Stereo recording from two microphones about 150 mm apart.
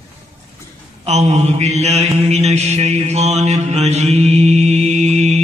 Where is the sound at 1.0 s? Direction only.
45° right (ahead or behind).